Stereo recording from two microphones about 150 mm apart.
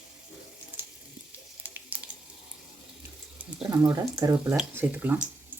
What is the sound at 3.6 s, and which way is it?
Speech, 25° right (ahead or behind).